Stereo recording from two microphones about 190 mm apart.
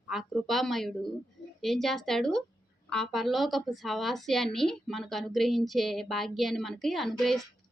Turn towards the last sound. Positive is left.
turn(degrees=0)  # may be behind; listen again after turning